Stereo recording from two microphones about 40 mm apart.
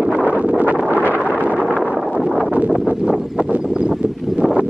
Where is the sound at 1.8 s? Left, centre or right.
Centre.